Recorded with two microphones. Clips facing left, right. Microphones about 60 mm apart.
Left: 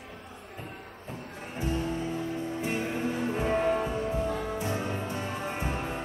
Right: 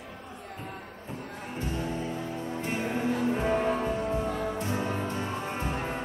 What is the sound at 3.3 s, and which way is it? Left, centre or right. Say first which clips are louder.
Music: even; centre.